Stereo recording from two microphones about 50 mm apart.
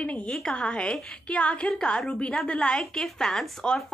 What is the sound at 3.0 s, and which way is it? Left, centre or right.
Speech, centre.